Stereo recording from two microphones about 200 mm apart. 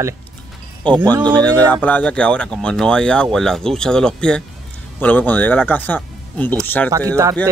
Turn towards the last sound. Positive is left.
turn(degrees=-15)  # may be behind; listen again after turning